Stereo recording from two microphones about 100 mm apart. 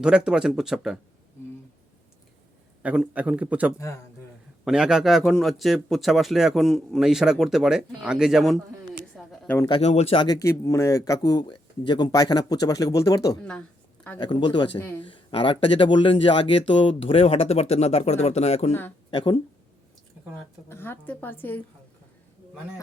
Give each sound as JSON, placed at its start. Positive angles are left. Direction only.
{"t": 0.0, "sound": "a man's voice", "side_deg": -10}
{"t": 2.8, "sound": "a man's voice", "side_deg": -10}
{"t": 9.1, "sound": "a sound", "side_deg": 0}
{"t": 9.6, "sound": "speech", "side_deg": 75}
{"t": 10.2, "sound": "speech", "side_deg": 40}
{"t": 10.4, "sound": "speech", "side_deg": 30}
{"t": 14.2, "sound": "speech", "side_deg": 55}
{"t": 18.7, "sound": "a woman's voice", "side_deg": 20}
{"t": 19.1, "sound": "speech", "side_deg": 55}
{"t": 20.7, "sound": "a woman's voice", "side_deg": 20}